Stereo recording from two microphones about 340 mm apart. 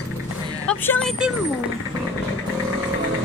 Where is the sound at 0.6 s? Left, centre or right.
Centre.